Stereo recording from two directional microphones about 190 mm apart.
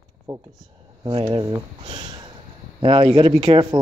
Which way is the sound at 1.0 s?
20° right (ahead or behind).